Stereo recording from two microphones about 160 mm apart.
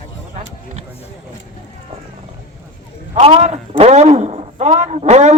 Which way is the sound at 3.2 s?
40° right (ahead or behind).